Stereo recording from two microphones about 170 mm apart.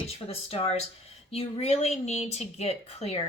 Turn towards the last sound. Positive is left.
turn(degrees=40)  # may be behind; listen again after turning